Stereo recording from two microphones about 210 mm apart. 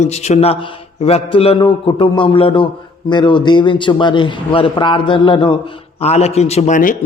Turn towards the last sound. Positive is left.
turn(degrees=35)  # may be behind; listen again after turning